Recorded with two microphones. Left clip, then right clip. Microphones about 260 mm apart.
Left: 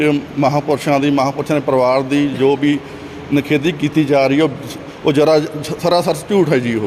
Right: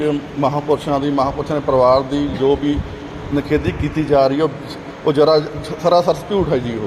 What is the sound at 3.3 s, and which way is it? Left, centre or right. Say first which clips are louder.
Speech: left 3 dB; left.